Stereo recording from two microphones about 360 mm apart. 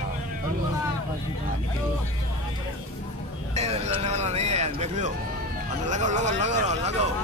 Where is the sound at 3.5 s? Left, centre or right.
Centre.